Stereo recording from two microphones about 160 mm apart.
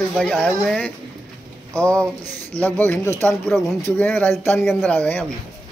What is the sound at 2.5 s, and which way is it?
Speech, 10° left (ahead or behind).